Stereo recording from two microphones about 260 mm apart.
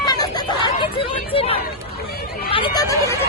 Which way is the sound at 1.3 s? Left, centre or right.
Left.